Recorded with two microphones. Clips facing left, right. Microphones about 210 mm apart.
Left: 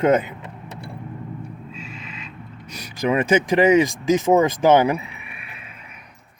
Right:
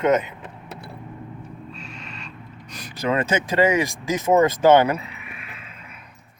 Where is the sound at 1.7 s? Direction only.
Centre (ahead or behind); by 4.1 s 20° left (ahead or behind).